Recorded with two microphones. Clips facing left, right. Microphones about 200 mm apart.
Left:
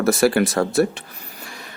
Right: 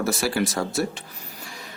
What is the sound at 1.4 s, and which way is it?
Vehicle, 60° left (ahead or behind).